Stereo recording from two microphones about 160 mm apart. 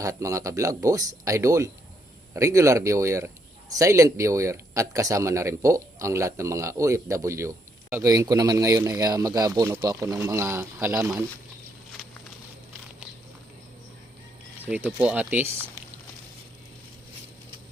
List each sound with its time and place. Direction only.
0.0 s speech: 20° right (ahead or behind)
14.7 s speech: 10° right (ahead or behind)